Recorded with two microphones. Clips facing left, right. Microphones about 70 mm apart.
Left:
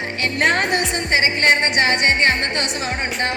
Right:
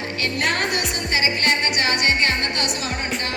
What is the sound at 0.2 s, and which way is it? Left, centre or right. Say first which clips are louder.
Music: left 5 dB; left.